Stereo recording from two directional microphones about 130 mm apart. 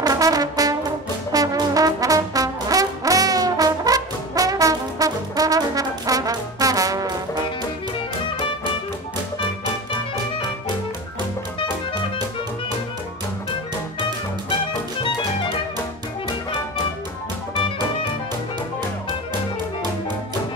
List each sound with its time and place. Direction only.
0.0 s brass instrument: 30° right (ahead or behind)